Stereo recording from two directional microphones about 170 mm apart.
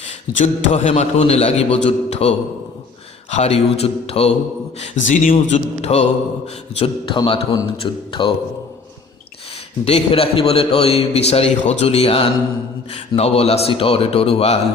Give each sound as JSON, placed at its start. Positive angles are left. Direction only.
{"t": 0.3, "sound": "a man's voice", "side_deg": 40}
{"t": 5.0, "sound": "a man's voice", "side_deg": 50}
{"t": 5.3, "sound": "a man's voice", "side_deg": 35}
{"t": 9.8, "sound": "a man's voice", "side_deg": 35}